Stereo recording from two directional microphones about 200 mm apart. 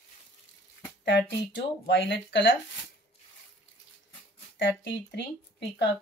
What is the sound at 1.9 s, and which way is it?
Speech, 65° left (ahead or behind).